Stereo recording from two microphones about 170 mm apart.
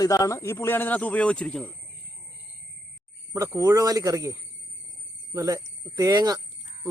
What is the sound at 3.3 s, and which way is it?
Speech, 20° right (ahead or behind).